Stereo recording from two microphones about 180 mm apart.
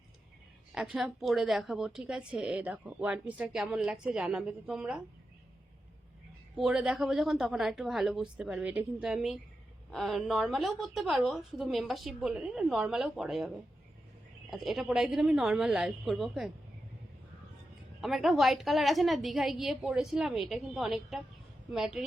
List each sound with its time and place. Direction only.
0.7 s a woman's voice: 5° right (ahead or behind)
6.6 s a woman's voice: 5° right (ahead or behind)
18.0 s a woman's voice: centre (ahead or behind)